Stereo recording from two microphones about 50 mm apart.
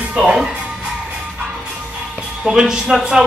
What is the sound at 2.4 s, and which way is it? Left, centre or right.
Speech, centre.